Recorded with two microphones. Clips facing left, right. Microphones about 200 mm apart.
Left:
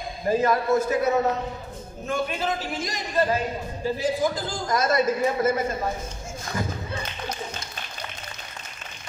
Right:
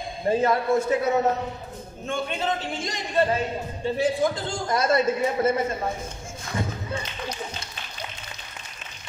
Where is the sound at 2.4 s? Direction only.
30° right (ahead or behind).